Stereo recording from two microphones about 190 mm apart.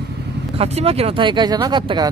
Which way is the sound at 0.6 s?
30° right (ahead or behind).